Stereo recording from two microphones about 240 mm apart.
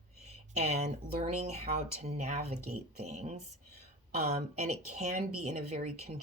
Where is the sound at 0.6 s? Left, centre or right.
Right.